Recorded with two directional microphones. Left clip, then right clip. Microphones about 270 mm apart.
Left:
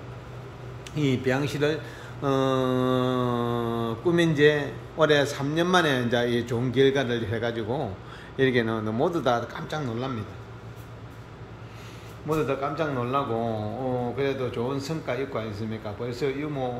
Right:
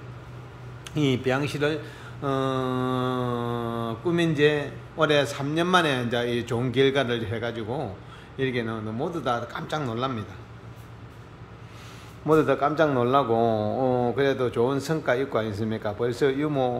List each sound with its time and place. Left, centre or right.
0.9 s mantra: centre
12.3 s a man's voice: centre